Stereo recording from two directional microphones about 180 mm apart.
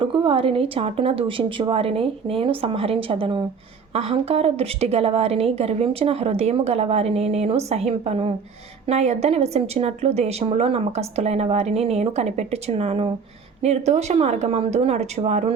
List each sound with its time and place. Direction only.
0.0 s a woman's voice: 30° right (ahead or behind)